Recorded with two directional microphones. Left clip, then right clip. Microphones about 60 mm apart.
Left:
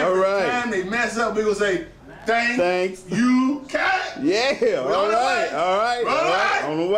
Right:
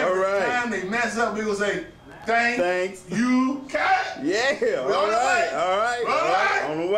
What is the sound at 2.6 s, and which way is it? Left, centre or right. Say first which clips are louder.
Speech: left 3 dB; centre.